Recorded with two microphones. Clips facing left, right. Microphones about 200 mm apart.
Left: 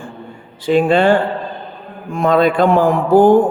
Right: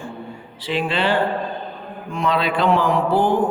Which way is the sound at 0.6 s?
50° left (ahead or behind).